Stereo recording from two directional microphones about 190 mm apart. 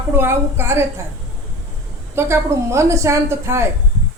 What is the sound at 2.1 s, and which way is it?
A woman's voice, 15° right (ahead or behind).